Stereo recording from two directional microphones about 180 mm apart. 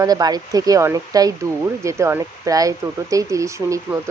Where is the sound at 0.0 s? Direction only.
20° right (ahead or behind).